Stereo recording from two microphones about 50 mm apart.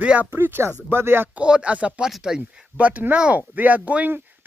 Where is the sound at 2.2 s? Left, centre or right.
Centre.